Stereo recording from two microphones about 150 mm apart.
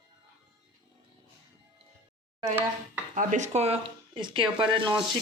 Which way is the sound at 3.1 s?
55° right (ahead or behind).